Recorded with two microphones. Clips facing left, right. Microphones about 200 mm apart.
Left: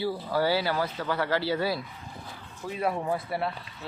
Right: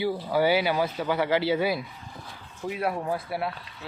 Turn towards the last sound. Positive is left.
turn(degrees=-5)  # may be behind; listen again after turning